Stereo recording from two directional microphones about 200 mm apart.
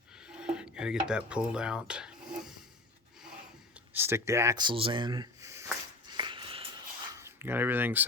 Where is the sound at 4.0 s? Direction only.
10° right (ahead or behind).